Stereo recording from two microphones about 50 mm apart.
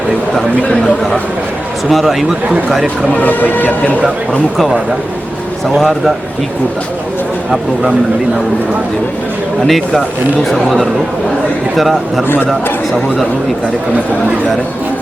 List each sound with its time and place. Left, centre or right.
1.9 s speech: centre
3.1 s speech: left
4.3 s speech: centre
9.6 s speech: centre